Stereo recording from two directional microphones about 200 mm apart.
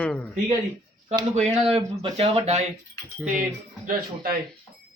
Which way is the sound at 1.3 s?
30° right (ahead or behind).